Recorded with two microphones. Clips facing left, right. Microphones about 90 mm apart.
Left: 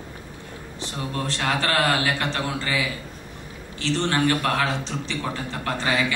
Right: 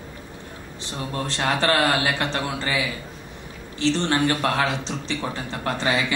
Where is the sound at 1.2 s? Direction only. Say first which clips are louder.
Right 3 dB; 25° right (ahead or behind).